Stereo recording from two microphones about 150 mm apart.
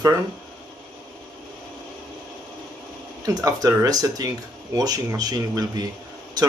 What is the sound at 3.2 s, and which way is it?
Speech, 25° right (ahead or behind).